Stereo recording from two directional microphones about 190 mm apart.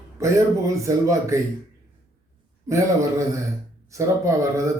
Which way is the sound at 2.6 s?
15° right (ahead or behind).